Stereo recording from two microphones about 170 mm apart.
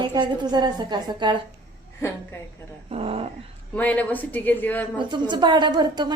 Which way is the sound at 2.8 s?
35° right (ahead or behind).